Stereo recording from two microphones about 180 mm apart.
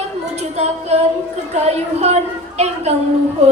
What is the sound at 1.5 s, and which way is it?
A woman's voice, 35° right (ahead or behind).